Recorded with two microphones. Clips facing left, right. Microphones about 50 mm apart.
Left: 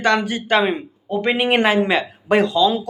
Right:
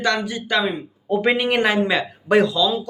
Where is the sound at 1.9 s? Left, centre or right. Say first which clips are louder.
Even; centre.